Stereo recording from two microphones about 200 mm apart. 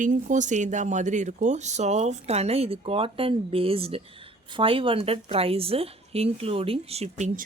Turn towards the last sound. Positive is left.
turn(degrees=-35)  # may be behind; listen again after turning